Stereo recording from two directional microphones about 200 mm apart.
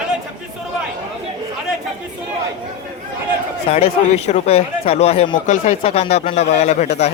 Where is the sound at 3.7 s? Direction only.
30° left (ahead or behind).